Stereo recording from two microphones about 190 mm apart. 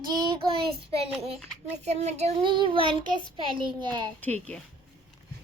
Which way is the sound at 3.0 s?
25° right (ahead or behind).